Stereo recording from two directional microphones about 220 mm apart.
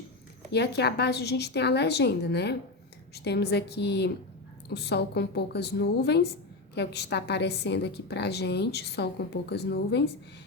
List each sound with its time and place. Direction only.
0.5 s a woman's voice: 50° left (ahead or behind)